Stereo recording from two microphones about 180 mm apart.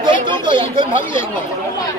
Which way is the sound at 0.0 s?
25° right (ahead or behind).